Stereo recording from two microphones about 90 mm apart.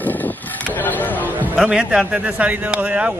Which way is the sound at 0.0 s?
20° left (ahead or behind).